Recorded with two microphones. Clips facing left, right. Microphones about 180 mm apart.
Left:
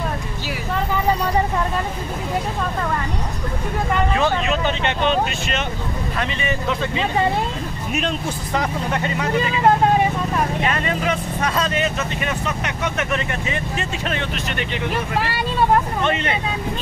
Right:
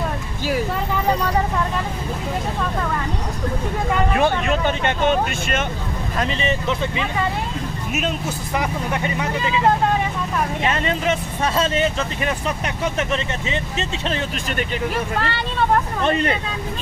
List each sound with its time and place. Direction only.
4.2 s speech: 50° right (ahead or behind)
8.5 s speech: 15° right (ahead or behind)
10.6 s speech: 25° right (ahead or behind)
15.1 s speech: 10° left (ahead or behind)
16.0 s speech: 40° right (ahead or behind)